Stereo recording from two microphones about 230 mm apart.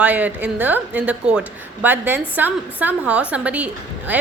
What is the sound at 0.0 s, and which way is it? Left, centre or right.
A woman's voice, centre.